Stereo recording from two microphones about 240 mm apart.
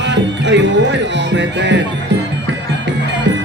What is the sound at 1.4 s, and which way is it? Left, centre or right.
Music, right.